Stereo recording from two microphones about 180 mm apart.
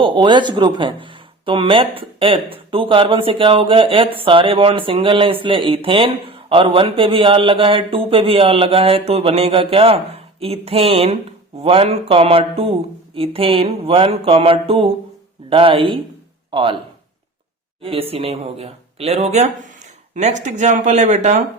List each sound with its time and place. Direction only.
0.0 s speech: 25° right (ahead or behind)
17.8 s speech: 30° right (ahead or behind)